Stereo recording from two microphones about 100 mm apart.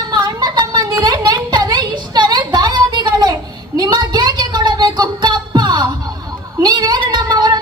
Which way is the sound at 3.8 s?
45° right (ahead or behind).